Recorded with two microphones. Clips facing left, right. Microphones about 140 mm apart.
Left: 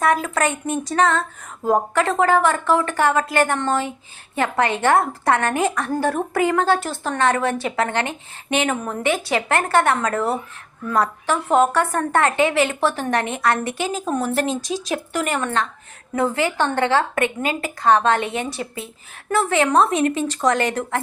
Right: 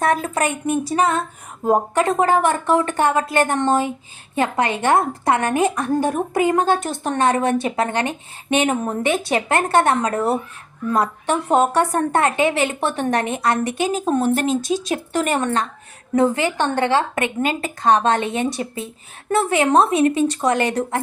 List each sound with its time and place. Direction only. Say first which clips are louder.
0.3 s a woman's voice: right 1 dB; 10° right (ahead or behind); by 15.6 s 35° right (ahead or behind)
16.1 s speech: right 3 dB; 20° right (ahead or behind)
17.4 s a woman's voice: right 1 dB; 25° right (ahead or behind)